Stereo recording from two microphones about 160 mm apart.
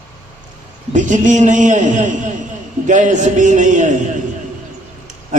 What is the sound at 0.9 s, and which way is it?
A man's voice, 50° right (ahead or behind).